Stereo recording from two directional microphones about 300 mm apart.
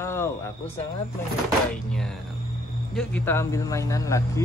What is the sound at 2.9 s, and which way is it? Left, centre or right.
Speech, centre.